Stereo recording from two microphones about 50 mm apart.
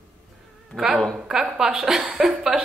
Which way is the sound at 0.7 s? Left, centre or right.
Left.